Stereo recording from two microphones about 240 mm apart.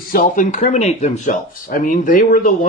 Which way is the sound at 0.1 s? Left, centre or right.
Left.